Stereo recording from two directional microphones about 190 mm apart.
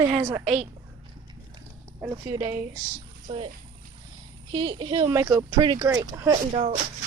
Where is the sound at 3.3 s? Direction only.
30° right (ahead or behind).